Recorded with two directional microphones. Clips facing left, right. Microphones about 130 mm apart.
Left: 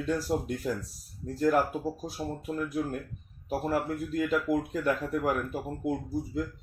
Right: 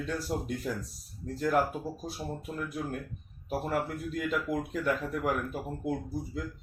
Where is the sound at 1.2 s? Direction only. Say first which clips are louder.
Left 2 dB; 5° left (ahead or behind).